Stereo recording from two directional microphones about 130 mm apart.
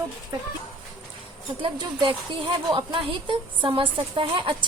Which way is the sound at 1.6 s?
35° right (ahead or behind).